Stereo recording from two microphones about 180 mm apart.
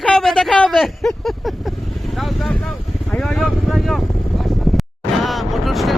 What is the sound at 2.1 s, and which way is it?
Vehicle, centre (ahead or behind).